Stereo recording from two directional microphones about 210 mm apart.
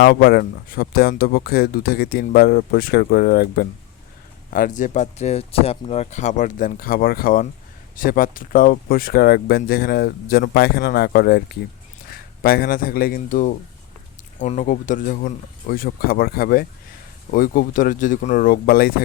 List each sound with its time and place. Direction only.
0.0 s speech: 50° left (ahead or behind)